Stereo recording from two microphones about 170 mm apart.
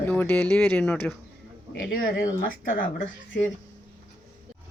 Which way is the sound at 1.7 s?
60° left (ahead or behind).